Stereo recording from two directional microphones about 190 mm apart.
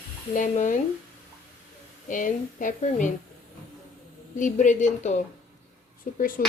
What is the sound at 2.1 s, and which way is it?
A woman's voice, 45° left (ahead or behind).